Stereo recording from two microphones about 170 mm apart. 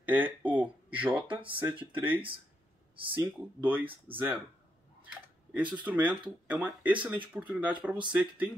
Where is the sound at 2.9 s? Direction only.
30° right (ahead or behind).